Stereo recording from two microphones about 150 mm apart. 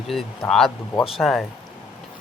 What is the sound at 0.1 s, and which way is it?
Speech, centre (ahead or behind).